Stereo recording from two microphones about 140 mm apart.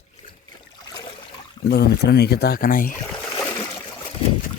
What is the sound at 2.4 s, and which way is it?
Speech, 90° left.